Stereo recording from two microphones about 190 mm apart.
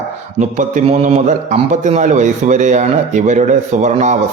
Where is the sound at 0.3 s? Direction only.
40° right (ahead or behind).